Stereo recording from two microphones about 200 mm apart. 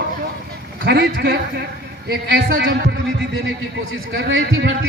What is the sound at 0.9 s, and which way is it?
A man's voice, 60° right (ahead or behind).